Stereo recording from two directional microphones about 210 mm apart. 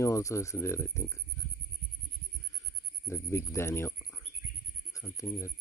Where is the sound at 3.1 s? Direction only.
15° left (ahead or behind).